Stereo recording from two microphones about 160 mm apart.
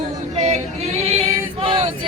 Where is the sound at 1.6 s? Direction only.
35° right (ahead or behind).